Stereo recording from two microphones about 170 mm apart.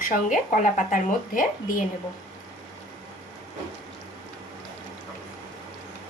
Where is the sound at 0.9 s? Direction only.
55° left (ahead or behind).